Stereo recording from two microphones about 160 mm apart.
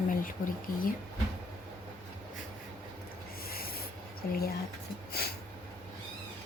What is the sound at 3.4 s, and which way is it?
Sanding, 70° left (ahead or behind).